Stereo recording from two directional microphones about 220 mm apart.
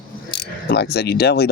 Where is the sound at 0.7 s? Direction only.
50° left (ahead or behind).